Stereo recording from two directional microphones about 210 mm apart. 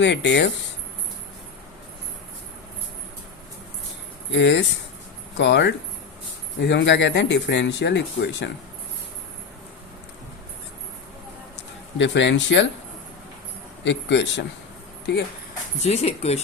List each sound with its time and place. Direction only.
0.0 s speech: 55° left (ahead or behind)
4.3 s speech: 60° left (ahead or behind)
11.9 s speech: 60° left (ahead or behind)
13.8 s speech: 55° left (ahead or behind)
15.8 s speech: 30° left (ahead or behind)